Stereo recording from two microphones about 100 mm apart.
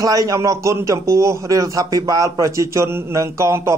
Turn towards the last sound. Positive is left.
turn(degrees=-30)  # may be behind; listen again after turning